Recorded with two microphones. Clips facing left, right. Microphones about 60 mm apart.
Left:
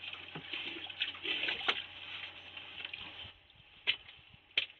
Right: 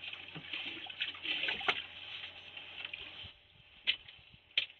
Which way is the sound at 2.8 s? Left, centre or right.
Centre.